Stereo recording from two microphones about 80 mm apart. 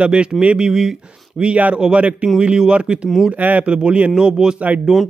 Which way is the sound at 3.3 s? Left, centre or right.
Centre.